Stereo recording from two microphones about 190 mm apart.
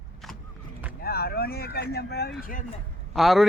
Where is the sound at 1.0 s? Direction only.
55° left (ahead or behind).